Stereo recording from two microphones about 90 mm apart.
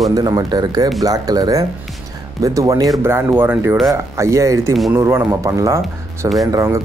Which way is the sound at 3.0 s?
25° right (ahead or behind).